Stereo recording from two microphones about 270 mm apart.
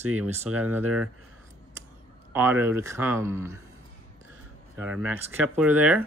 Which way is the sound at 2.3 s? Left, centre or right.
Centre.